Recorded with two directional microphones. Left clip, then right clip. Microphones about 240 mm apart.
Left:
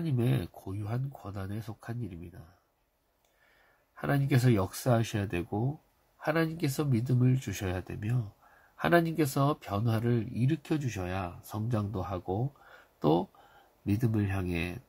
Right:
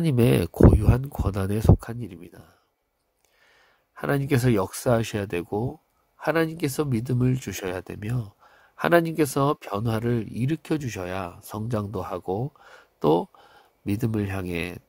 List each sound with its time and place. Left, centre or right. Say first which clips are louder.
0.0 s speech: right 12 dB; right
3.9 s speech: right 6 dB; right